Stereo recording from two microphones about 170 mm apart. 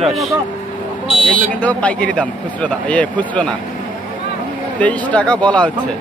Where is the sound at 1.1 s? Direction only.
5° left (ahead or behind).